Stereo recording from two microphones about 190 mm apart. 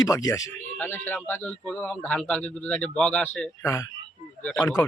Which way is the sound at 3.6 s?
15° left (ahead or behind).